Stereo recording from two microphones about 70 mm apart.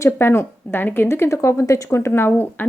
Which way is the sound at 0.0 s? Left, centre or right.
Left.